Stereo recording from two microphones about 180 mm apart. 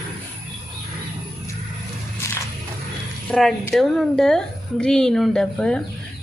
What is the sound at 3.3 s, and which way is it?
A woman's voice, centre (ahead or behind).